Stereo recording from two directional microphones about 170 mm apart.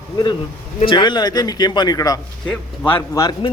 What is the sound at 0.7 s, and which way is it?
Speech, 30° left (ahead or behind).